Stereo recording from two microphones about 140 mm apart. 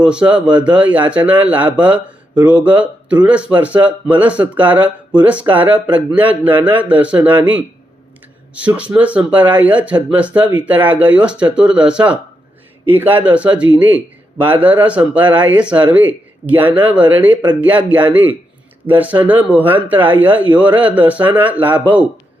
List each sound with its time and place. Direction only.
0.0 s a man's voice: 10° right (ahead or behind)